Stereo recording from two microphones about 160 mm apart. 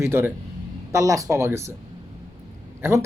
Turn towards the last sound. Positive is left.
turn(degrees=-15)  # may be behind; listen again after turning